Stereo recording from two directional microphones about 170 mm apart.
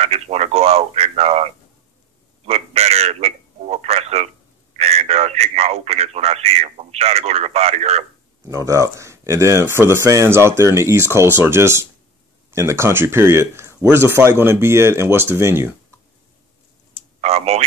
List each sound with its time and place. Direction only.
0.0 s speech: 40° right (ahead or behind)
2.4 s telephone: 35° right (ahead or behind)
4.7 s speech: 35° right (ahead or behind)
8.5 s speech: 20° right (ahead or behind)
17.2 s speech: 40° right (ahead or behind)